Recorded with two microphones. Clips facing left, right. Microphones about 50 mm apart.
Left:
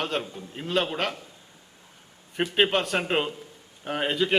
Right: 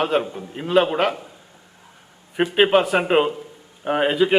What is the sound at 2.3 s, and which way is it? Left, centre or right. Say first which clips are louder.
A man's voice: right 7 dB; centre.